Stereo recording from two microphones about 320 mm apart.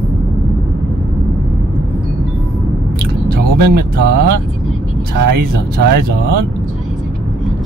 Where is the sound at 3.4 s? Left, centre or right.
Right.